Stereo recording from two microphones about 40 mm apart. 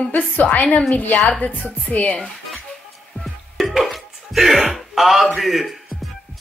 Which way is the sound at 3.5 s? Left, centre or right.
Centre.